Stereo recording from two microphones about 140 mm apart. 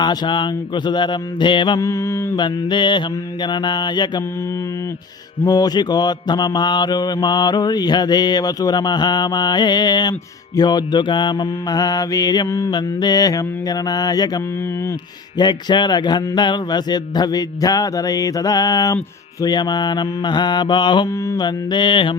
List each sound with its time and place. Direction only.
0.0 s mantra: 35° left (ahead or behind)
1.8 s mantra: 20° left (ahead or behind)
2.4 s mantra: 35° left (ahead or behind)
5.5 s mantra: 30° left (ahead or behind)